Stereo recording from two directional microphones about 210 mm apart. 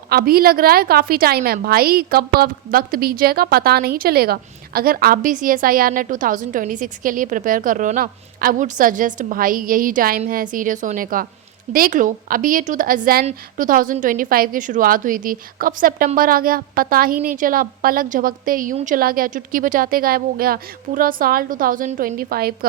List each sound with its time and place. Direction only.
0.1 s a woman's voice: 45° right (ahead or behind)